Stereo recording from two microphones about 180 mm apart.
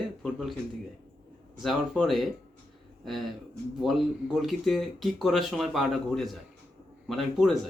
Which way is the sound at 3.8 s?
Centre (ahead or behind).